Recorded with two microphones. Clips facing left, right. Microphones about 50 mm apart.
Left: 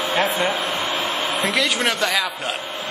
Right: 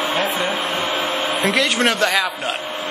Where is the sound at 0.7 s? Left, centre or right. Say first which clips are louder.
Right 2 dB; right.